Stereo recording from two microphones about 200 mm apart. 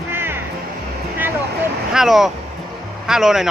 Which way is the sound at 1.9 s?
Centre (ahead or behind).